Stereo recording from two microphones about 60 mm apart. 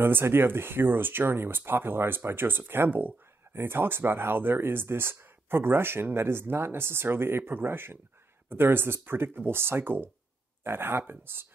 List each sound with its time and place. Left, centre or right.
0.0 s speech: right